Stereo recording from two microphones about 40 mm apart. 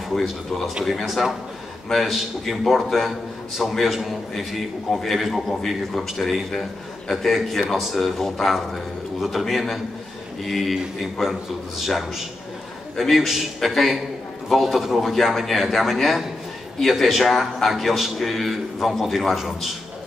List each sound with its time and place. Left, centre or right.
0.1 s a man's voice: centre